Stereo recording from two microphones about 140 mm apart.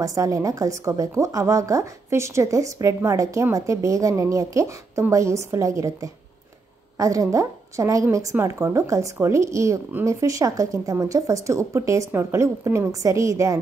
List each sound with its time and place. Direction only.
0.0 s a woman's voice: 25° right (ahead or behind)